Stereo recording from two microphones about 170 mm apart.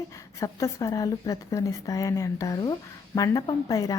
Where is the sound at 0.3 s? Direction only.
20° left (ahead or behind).